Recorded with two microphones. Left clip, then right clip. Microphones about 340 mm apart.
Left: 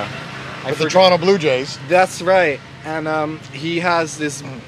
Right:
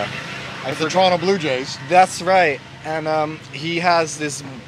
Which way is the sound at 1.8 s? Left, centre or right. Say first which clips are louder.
Right 1 dB; centre.